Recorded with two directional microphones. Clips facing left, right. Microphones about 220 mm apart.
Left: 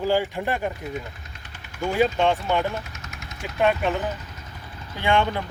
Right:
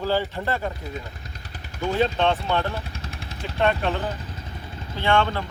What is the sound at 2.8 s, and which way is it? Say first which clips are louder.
Vehicle: right 4 dB; 30° right (ahead or behind).